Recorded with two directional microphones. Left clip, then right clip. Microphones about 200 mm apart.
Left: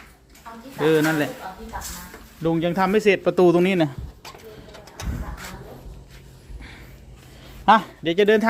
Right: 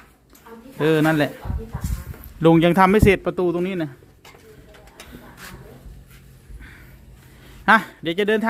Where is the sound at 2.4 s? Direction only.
50° right (ahead or behind); by 3.2 s 20° right (ahead or behind).